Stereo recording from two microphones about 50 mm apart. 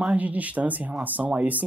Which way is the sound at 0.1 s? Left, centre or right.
Right.